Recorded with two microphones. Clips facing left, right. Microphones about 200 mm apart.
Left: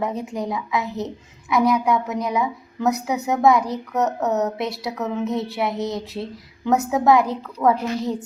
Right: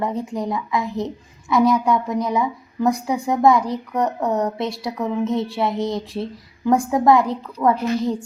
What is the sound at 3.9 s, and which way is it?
Speech, 5° left (ahead or behind).